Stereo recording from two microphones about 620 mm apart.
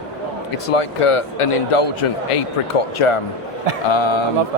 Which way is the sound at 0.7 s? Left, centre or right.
Left.